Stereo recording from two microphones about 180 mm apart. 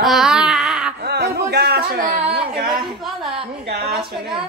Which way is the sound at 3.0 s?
Centre (ahead or behind).